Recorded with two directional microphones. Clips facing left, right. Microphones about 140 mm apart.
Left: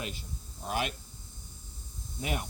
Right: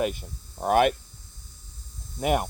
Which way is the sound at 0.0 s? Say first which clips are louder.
Right 12 dB; 55° right (ahead or behind).